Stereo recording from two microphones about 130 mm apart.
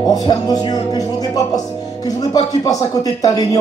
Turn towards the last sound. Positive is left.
turn(degrees=25)  # may be behind; listen again after turning